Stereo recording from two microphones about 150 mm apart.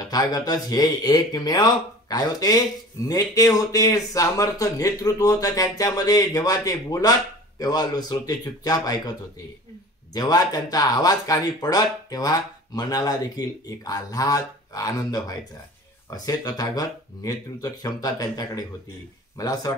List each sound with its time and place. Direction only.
0.0 s speech: 25° left (ahead or behind)
10.1 s speech: 25° left (ahead or behind)